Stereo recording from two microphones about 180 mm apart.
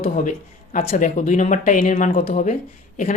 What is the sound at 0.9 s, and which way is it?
Speech, 45° left (ahead or behind).